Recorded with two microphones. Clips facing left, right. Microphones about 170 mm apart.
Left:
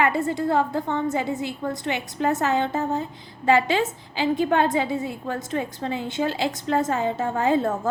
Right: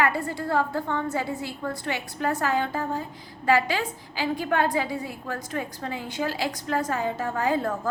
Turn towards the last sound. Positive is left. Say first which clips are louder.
# left 4 dB
turn(degrees=25)  # may be behind; listen again after turning